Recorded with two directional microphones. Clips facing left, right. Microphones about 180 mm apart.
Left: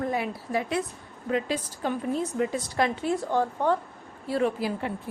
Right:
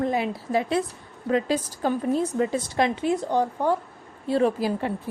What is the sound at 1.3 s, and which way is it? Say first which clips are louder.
A woman's voice: right 4 dB; 40° right (ahead or behind).